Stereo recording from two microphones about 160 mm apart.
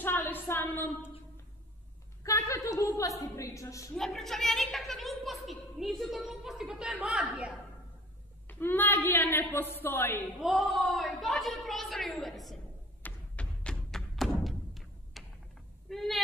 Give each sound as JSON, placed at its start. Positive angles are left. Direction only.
{"t": 0.0, "sound": "a sound", "side_deg": 15}
{"t": 3.9, "sound": "a woman's voice", "side_deg": 0}
{"t": 8.5, "sound": "a woman's voice", "side_deg": 15}
{"t": 10.4, "sound": "a woman's voice", "side_deg": 0}
{"t": 13.0, "sound": "thump", "side_deg": 5}
{"t": 15.9, "sound": "speech", "side_deg": 0}